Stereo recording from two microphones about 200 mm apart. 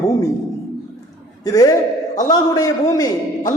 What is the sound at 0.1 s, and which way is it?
Speech, 15° left (ahead or behind).